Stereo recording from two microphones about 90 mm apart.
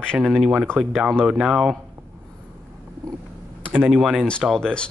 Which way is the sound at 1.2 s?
10° right (ahead or behind).